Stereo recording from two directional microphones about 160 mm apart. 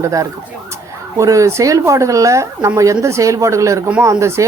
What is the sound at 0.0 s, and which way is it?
Speech, 20° right (ahead or behind).